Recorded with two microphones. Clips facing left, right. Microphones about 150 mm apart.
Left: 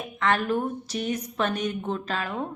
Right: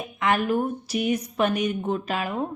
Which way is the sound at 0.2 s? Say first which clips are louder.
Right 2 dB; 10° right (ahead or behind).